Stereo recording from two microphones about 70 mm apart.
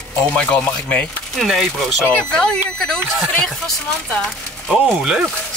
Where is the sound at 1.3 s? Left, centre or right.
Centre.